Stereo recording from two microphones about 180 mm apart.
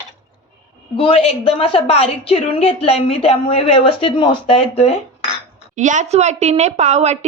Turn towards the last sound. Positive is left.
turn(degrees=-40)  # may be behind; listen again after turning